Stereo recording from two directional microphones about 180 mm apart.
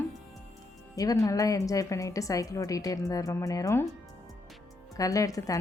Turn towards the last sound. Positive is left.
turn(degrees=20)  # may be behind; listen again after turning